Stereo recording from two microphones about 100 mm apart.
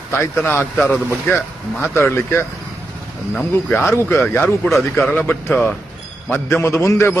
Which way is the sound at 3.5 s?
25° left (ahead or behind).